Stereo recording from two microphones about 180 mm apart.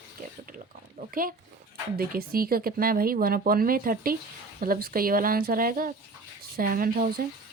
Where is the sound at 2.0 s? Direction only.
55° right (ahead or behind).